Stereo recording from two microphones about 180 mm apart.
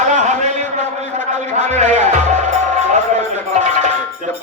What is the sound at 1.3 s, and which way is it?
Music, 40° right (ahead or behind).